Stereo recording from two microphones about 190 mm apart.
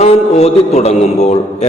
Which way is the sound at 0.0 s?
35° left (ahead or behind).